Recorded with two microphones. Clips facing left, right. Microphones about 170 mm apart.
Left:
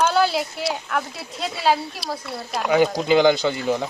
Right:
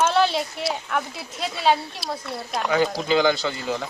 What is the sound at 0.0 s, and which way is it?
A woman's voice, centre (ahead or behind).